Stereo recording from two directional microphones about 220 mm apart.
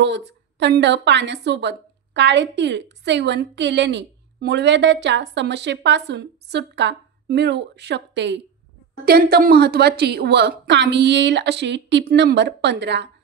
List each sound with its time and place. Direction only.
0.0 s a woman's voice: 50° right (ahead or behind)